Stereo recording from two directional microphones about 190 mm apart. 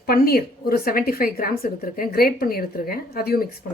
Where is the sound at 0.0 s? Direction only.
55° left (ahead or behind).